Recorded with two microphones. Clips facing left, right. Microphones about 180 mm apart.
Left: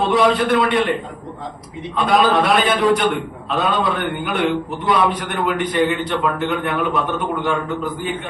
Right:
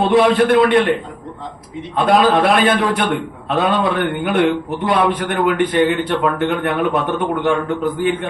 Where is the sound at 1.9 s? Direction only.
55° right (ahead or behind).